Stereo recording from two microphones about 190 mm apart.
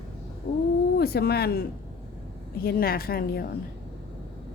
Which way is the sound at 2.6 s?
50° left (ahead or behind).